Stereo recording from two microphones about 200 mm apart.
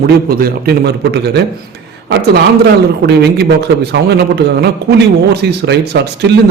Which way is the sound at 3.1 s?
55° right (ahead or behind).